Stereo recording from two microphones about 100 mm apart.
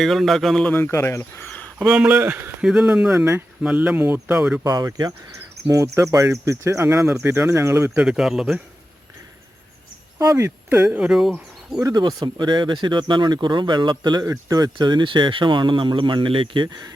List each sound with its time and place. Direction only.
0.0 s speech: centre (ahead or behind)
0.7 s speech: 25° left (ahead or behind)
1.4 s a sound: 15° left (ahead or behind)
1.8 s speech: 10° right (ahead or behind)
4.6 s speech: 35° right (ahead or behind)
7.8 s speech: 10° right (ahead or behind)
10.2 s speech: 30° right (ahead or behind)
10.8 s speech: 10° right (ahead or behind)
11.8 s speech: 40° right (ahead or behind)